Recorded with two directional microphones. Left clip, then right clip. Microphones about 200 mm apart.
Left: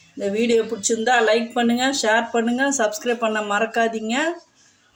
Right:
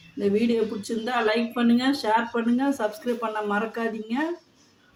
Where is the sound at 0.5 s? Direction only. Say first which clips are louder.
Left 7 dB; 50° left (ahead or behind).